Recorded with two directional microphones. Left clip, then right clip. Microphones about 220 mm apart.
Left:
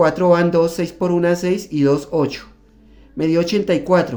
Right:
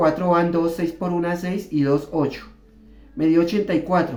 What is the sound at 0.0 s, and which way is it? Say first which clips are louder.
Speech: left 4 dB; 50° left (ahead or behind).